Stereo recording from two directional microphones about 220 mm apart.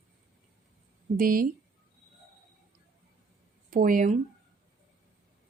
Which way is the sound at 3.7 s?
40° right (ahead or behind).